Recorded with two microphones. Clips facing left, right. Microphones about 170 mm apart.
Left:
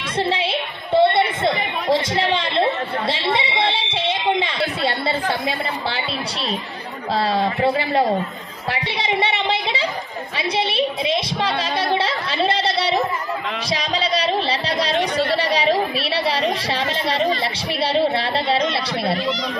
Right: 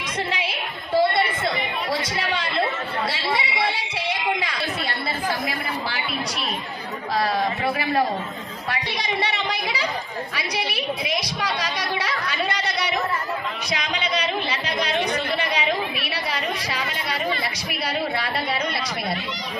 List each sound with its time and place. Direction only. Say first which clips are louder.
0.3 s chatter: left 6 dB; 30° left (ahead or behind)
3.3 s a woman's voice: left 4 dB; 25° left (ahead or behind)
8.9 s a woman's voice: left 6 dB; 25° left (ahead or behind)
17.9 s a woman's voice: left 7 dB; 30° left (ahead or behind)